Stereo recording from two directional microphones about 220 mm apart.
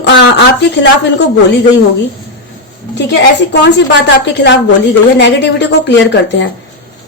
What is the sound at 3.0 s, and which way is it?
A woman's voice, 50° left (ahead or behind).